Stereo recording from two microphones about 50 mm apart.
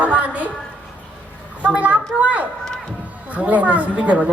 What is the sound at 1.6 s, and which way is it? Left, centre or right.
A man's voice, right.